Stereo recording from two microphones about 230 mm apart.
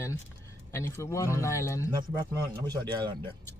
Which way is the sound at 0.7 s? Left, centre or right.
Centre.